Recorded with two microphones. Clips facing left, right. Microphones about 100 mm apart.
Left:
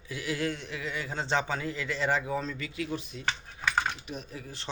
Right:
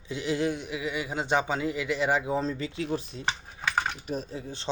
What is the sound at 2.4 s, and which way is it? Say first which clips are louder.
Speech: right 4 dB; 30° right (ahead or behind).